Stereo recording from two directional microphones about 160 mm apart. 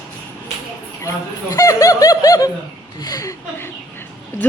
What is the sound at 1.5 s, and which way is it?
Speech, 20° left (ahead or behind).